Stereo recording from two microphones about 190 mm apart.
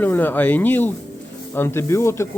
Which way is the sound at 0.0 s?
10° left (ahead or behind).